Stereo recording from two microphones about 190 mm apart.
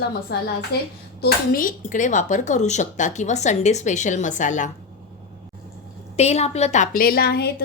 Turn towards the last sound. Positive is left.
turn(degrees=60)  # may be behind; listen again after turning